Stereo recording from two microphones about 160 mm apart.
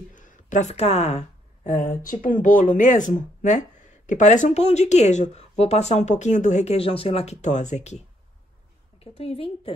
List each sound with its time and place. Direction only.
0.1 s a woman's voice: 50° left (ahead or behind)
9.0 s a woman's voice: 40° left (ahead or behind)